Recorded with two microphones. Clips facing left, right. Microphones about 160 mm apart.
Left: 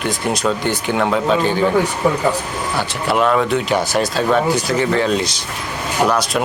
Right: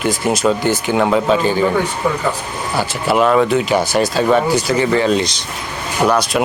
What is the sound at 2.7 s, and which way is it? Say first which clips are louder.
Speech: right 3 dB; 5° right (ahead or behind).